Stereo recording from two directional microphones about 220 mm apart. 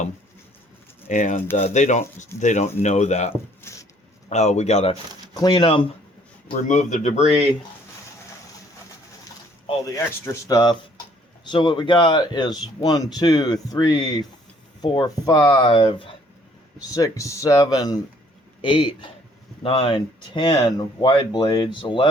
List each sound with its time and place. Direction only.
1.0 s speech: 35° left (ahead or behind)
3.6 s a sound: 10° left (ahead or behind)
4.3 s speech: 30° left (ahead or behind)
6.5 s speech: 35° left (ahead or behind)
9.6 s speech: 10° left (ahead or behind)